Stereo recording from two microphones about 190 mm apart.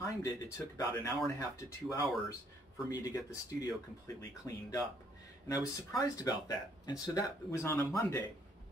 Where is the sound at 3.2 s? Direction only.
20° left (ahead or behind).